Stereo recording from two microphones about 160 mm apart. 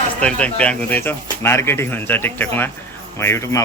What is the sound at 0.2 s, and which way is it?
Speech, 10° left (ahead or behind).